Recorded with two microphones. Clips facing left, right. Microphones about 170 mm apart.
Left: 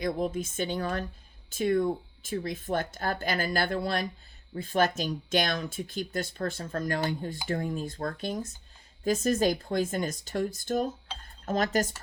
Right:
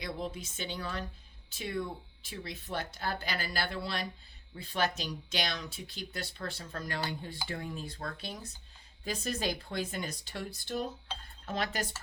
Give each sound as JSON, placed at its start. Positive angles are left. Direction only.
{"t": 0.0, "sound": "speech", "side_deg": 50}